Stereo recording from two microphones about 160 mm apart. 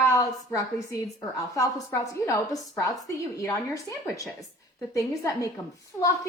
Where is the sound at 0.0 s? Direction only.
20° left (ahead or behind).